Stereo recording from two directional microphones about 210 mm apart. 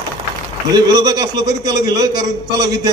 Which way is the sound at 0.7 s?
20° right (ahead or behind).